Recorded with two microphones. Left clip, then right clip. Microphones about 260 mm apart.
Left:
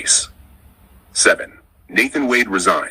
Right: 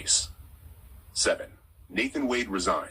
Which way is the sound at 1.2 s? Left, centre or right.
Left.